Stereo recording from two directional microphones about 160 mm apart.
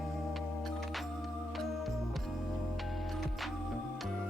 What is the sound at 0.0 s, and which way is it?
Music, centre (ahead or behind).